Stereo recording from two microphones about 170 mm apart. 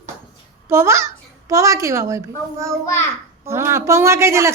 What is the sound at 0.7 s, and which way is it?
A child's voice, 15° right (ahead or behind).